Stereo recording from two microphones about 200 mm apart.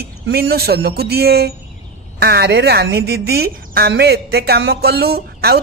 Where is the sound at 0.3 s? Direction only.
50° right (ahead or behind).